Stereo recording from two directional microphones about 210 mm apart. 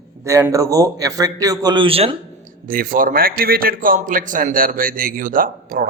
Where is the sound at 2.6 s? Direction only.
40° right (ahead or behind).